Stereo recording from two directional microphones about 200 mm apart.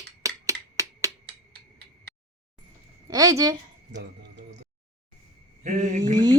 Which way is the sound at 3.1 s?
15° right (ahead or behind).